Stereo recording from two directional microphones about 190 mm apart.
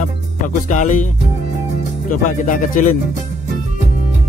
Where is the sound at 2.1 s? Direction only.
45° left (ahead or behind).